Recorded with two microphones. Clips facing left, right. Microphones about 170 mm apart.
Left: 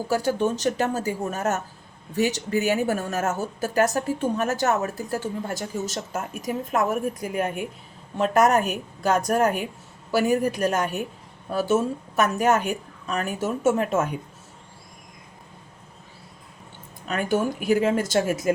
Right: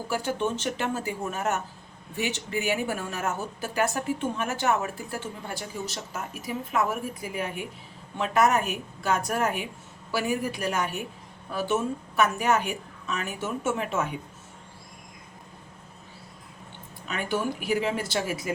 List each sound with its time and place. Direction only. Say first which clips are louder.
0.1 s a woman's voice: left 5 dB; 40° left (ahead or behind)
17.1 s speech: left 5 dB; 45° left (ahead or behind)